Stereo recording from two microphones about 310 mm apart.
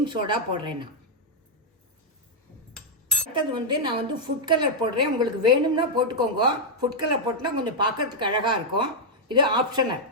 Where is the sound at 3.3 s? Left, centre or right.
Centre.